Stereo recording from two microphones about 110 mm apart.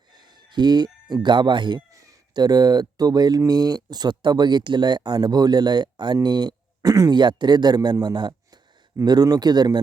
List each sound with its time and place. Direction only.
0.5 s speech: 40° right (ahead or behind)